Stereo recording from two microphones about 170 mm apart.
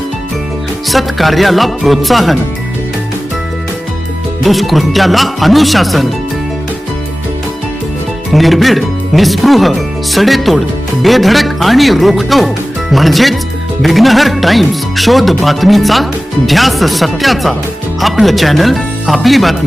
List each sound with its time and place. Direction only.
0.9 s speech: centre (ahead or behind)
4.4 s speech: centre (ahead or behind)
8.3 s speech: centre (ahead or behind)